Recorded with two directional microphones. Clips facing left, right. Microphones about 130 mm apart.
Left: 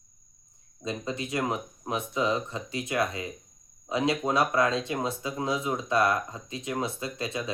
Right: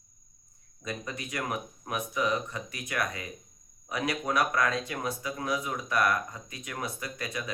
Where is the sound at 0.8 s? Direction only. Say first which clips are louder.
Left 5 dB; 25° left (ahead or behind).